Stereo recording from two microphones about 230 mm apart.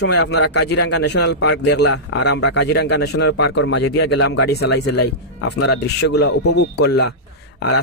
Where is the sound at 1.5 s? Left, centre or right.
Left.